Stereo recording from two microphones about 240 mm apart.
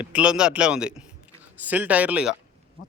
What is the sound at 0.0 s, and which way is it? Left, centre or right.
Speech, centre.